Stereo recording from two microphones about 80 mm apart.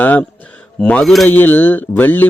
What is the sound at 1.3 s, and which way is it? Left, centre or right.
Speech, left.